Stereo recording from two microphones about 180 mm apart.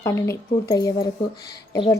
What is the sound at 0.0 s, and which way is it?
A woman's voice, 15° left (ahead or behind).